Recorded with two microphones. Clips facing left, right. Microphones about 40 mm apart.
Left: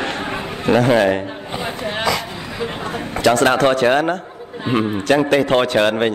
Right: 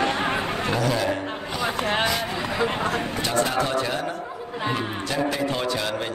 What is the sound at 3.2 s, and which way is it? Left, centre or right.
A man's voice, left.